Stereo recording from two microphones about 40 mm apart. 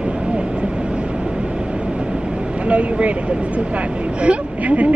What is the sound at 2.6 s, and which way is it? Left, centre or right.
Speech, right.